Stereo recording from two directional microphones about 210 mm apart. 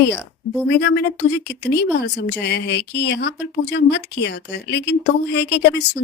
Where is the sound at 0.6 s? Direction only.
55° left (ahead or behind).